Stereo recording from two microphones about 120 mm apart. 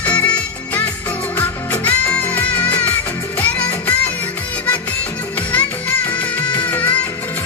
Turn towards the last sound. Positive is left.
turn(degrees=15)  # may be behind; listen again after turning